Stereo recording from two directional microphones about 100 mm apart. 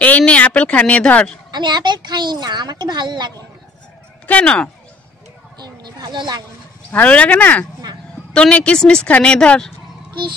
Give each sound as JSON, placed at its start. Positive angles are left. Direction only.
{"t": 0.0, "sound": "a woman's voice", "side_deg": 15}
{"t": 1.5, "sound": "a woman's voice", "side_deg": -50}
{"t": 4.3, "sound": "a woman's voice", "side_deg": 10}
{"t": 5.6, "sound": "a sound", "side_deg": -45}
{"t": 6.9, "sound": "a woman's voice", "side_deg": 15}